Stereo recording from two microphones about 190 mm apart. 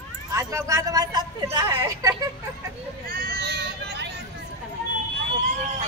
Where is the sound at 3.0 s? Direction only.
55° right (ahead or behind).